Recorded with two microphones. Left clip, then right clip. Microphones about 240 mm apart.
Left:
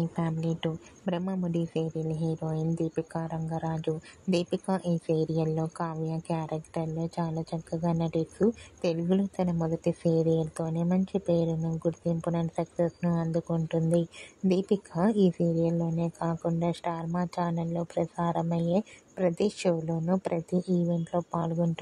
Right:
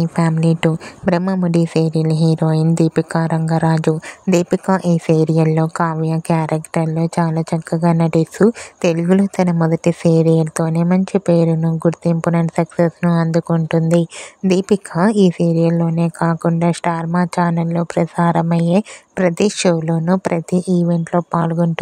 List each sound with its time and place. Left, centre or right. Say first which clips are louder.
0.0 s speech: right 14 dB; right